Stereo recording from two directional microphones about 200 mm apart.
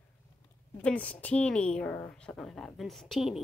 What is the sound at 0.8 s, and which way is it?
A woman's voice, 5° left (ahead or behind).